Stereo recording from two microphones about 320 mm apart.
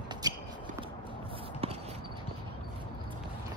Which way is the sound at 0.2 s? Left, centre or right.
Centre.